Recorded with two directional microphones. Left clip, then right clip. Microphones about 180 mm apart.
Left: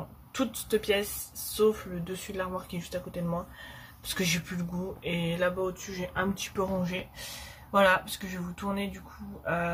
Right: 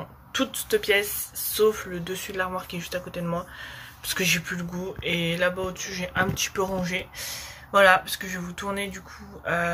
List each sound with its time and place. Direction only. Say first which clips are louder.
0.3 s speech: right 5 dB; 10° left (ahead or behind)
5.0 s a sound: right 5 dB; 15° left (ahead or behind)
6.3 s speech: right 5 dB; 10° left (ahead or behind)